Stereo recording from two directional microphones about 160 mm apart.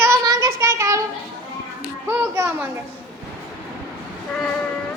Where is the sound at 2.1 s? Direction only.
15° right (ahead or behind).